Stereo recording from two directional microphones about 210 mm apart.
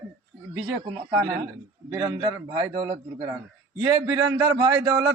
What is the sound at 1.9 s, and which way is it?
A man's voice, 15° right (ahead or behind).